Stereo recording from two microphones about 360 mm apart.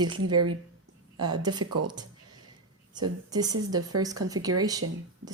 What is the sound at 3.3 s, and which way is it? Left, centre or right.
A woman's voice, centre.